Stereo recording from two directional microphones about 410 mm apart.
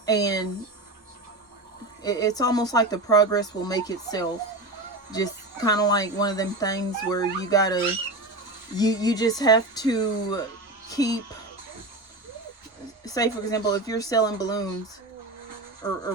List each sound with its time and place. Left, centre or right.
0.0 s speech: centre
2.0 s speech: centre
13.1 s speech: centre